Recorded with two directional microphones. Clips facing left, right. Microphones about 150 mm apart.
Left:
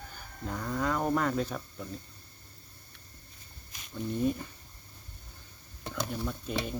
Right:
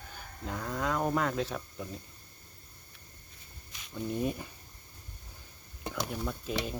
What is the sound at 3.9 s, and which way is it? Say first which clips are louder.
Speech: left 2 dB; 5° right (ahead or behind).